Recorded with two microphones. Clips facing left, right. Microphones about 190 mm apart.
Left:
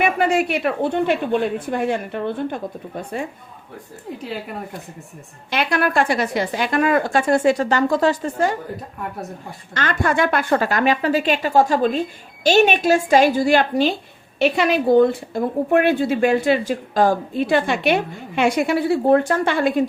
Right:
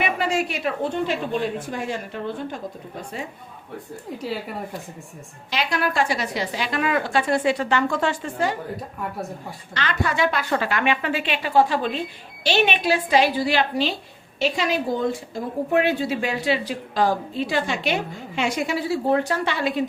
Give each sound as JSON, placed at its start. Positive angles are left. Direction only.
{"t": 0.0, "sound": "speech", "side_deg": 55}
{"t": 5.5, "sound": "a woman's voice", "side_deg": 55}
{"t": 9.7, "sound": "a woman's voice", "side_deg": 50}
{"t": 14.3, "sound": "speech", "side_deg": 60}